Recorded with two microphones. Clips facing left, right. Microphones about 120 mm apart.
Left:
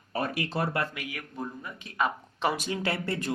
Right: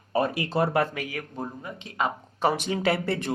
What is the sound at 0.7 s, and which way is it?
Speech, 40° right (ahead or behind).